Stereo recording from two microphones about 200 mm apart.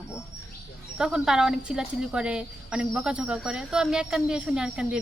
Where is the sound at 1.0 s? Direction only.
5° right (ahead or behind).